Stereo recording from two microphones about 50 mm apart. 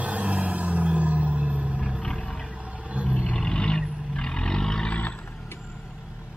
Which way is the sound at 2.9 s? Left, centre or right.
Right.